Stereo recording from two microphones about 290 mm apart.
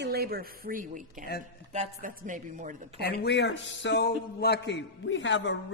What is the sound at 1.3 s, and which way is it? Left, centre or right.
Speech, left.